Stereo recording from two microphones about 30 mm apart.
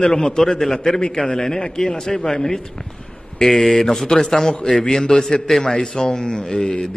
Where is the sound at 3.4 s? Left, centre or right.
Centre; by 6.9 s left.